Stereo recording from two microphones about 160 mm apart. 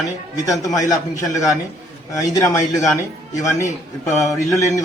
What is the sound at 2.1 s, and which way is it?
Speech, 20° left (ahead or behind).